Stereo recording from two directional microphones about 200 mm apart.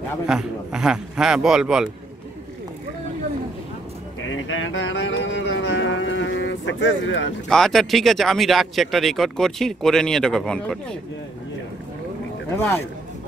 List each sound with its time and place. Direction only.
0.3 s speech: 5° right (ahead or behind)
4.3 s a sound: 75° left (ahead or behind)
7.4 s speech: centre (ahead or behind)